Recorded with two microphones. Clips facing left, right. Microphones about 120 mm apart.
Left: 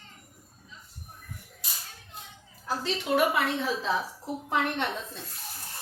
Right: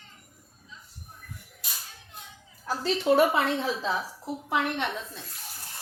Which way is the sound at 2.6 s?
35° right (ahead or behind).